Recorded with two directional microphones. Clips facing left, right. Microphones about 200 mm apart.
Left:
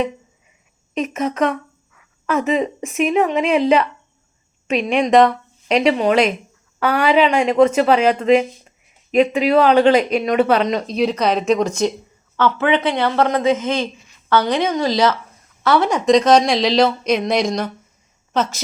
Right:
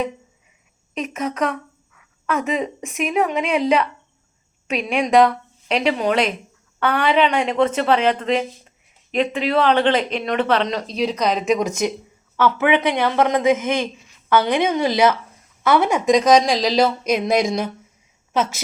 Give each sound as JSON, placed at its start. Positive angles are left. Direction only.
{"t": 0.9, "sound": "a woman's voice", "side_deg": 5}
{"t": 12.4, "sound": "a woman's voice", "side_deg": -15}
{"t": 15.8, "sound": "a woman's voice", "side_deg": -5}